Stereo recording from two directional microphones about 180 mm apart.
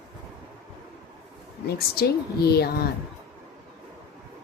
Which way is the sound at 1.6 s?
60° left (ahead or behind).